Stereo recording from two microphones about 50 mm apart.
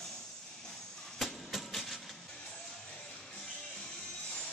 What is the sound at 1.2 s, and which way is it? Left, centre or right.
Train, centre.